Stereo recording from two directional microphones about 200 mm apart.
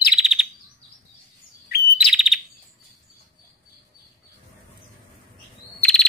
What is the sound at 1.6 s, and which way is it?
Bird, 50° left (ahead or behind).